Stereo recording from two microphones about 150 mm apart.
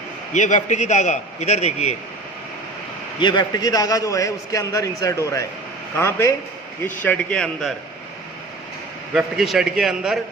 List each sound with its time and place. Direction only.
0.3 s a man's voice: 55° left (ahead or behind)
3.2 s a man's voice: 30° left (ahead or behind); by 7.7 s 5° left (ahead or behind)
9.1 s a man's voice: 5° right (ahead or behind)